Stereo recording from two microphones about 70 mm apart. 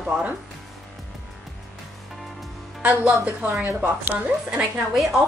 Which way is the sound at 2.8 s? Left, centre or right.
Right.